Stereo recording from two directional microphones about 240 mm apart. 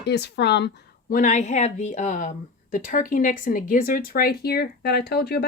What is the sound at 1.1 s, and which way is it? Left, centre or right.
Speech, left.